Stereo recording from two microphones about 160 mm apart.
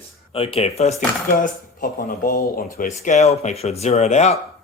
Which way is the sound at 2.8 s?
55° left (ahead or behind).